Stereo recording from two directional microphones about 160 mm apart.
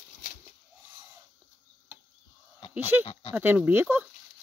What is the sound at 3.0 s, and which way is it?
Speech, 35° left (ahead or behind).